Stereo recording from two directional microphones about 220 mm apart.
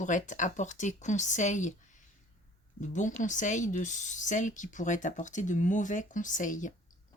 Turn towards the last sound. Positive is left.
turn(degrees=35)  # may be behind; listen again after turning